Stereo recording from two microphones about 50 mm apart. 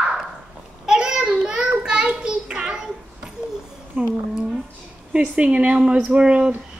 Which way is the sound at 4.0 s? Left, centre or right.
Right.